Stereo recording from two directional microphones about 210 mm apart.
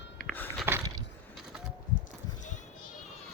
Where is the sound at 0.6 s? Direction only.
10° right (ahead or behind).